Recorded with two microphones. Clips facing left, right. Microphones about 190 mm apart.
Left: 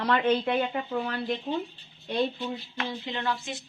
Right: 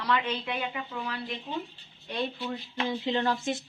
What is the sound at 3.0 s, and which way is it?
Speech, 35° right (ahead or behind).